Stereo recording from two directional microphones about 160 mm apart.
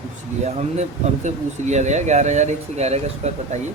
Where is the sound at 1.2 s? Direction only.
45° right (ahead or behind).